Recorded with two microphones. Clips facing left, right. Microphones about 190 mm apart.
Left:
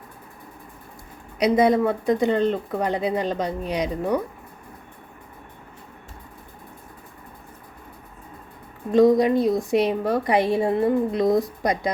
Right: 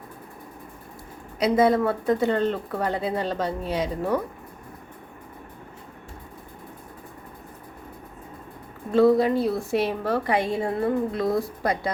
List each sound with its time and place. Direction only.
1.4 s a woman's voice: 15° left (ahead or behind)
8.9 s a woman's voice: 15° left (ahead or behind)